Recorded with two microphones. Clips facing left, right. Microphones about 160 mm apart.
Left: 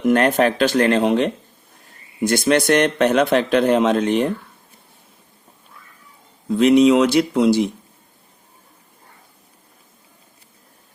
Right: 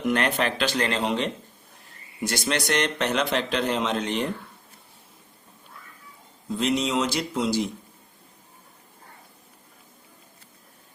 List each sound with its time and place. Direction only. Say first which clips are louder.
0.0 s speech: left 8 dB; 50° left (ahead or behind)
6.5 s speech: left 12 dB; 65° left (ahead or behind)